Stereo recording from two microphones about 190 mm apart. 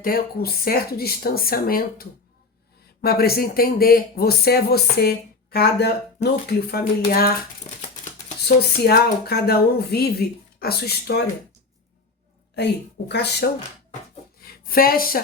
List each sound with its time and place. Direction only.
0.0 s speech: 50° left (ahead or behind)
8.4 s speech: 55° left (ahead or behind)
13.1 s speech: 60° left (ahead or behind)
14.3 s a sound: 50° left (ahead or behind)